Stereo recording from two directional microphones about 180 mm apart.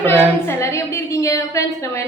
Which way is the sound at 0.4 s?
15° left (ahead or behind).